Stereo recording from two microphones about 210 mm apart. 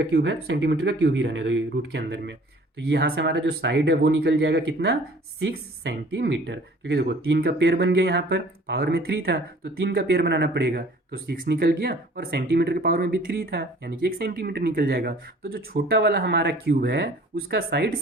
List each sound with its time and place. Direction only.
0.0 s speech: 55° right (ahead or behind)